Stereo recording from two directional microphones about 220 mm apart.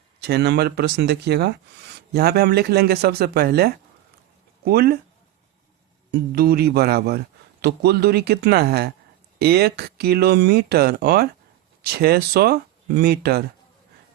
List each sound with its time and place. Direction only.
0.2 s speech: 50° right (ahead or behind)
6.1 s speech: 45° right (ahead or behind)